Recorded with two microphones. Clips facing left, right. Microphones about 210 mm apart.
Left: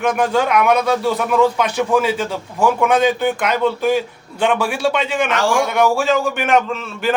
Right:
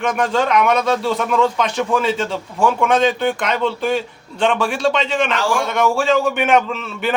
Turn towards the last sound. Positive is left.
turn(degrees=0)  # may be behind; listen again after turning